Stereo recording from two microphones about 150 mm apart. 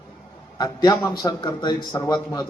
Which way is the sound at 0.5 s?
25° left (ahead or behind).